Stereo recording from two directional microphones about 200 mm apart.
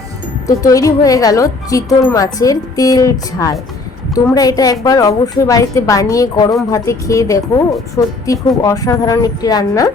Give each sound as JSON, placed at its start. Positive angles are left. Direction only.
{"t": 0.4, "sound": "a woman's voice", "side_deg": 15}